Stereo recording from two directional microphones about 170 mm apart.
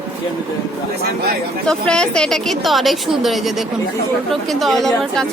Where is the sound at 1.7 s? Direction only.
5° left (ahead or behind).